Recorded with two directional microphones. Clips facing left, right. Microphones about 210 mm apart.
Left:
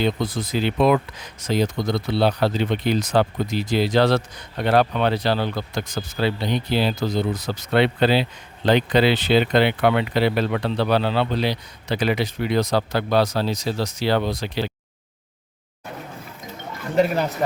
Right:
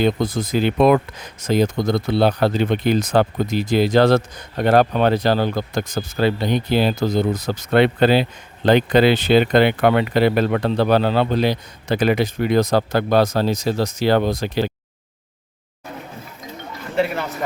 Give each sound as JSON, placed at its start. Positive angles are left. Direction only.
{"t": 0.0, "sound": "speech", "side_deg": -45}
{"t": 16.9, "sound": "a man's voice", "side_deg": 40}